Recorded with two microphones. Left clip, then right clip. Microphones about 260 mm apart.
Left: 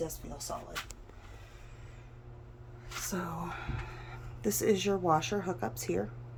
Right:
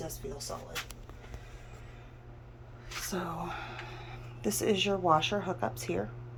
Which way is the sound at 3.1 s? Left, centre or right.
Centre.